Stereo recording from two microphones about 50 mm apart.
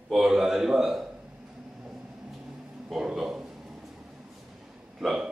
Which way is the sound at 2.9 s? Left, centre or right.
Centre.